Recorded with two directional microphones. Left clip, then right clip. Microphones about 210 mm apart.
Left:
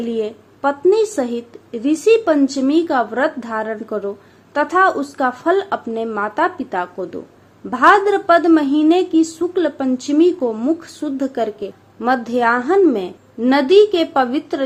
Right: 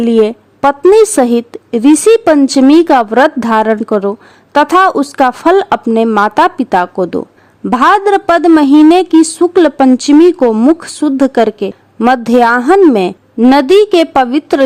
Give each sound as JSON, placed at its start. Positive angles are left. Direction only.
{"t": 0.0, "sound": "a woman's voice", "side_deg": -55}